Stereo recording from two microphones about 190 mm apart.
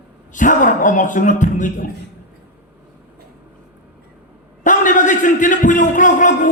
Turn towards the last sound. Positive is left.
turn(degrees=45)  # may be behind; listen again after turning